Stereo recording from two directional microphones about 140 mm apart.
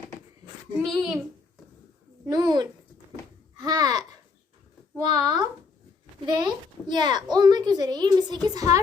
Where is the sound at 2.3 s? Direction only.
30° right (ahead or behind).